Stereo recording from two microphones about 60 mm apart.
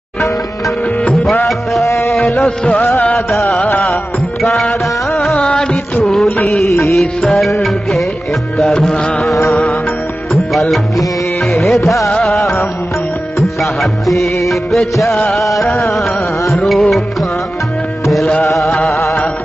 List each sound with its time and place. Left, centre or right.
1.9 s music: left
2.4 s music: left
2.8 s music: left
3.3 s music: centre
3.6 s music: left
3.9 s music: centre
6.9 s music: centre
8.7 s music: centre
18.6 s music: centre